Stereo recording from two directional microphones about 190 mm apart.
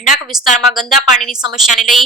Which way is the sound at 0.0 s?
45° left (ahead or behind).